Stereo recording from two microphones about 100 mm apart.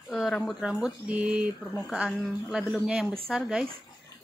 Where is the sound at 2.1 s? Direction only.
Centre (ahead or behind).